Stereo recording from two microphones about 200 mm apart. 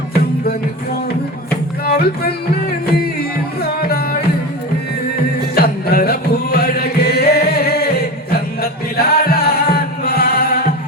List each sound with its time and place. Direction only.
1.5 s music: 50° left (ahead or behind)
5.5 s music: 50° left (ahead or behind)